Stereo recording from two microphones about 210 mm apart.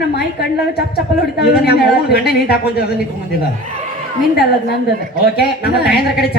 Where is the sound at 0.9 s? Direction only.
50° left (ahead or behind).